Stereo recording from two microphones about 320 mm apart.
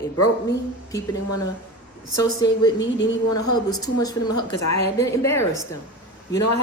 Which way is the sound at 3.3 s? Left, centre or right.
Left.